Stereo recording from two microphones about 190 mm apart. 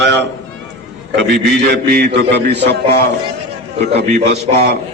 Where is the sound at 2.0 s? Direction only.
65° right (ahead or behind).